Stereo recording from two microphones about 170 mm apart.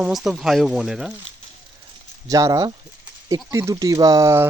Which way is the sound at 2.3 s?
20° right (ahead or behind).